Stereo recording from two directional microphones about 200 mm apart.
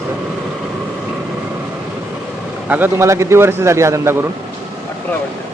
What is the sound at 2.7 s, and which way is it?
Speech, 10° right (ahead or behind).